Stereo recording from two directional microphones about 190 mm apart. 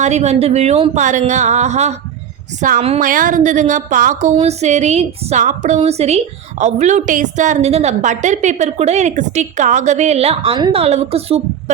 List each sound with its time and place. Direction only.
0.0 s a woman's voice: 35° right (ahead or behind)